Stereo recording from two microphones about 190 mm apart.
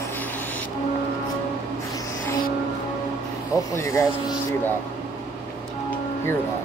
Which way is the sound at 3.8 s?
15° left (ahead or behind).